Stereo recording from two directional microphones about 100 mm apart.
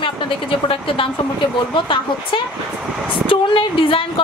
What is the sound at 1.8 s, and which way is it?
A woman's voice, 55° left (ahead or behind).